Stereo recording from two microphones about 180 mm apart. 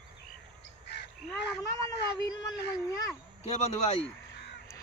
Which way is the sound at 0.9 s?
70° left (ahead or behind).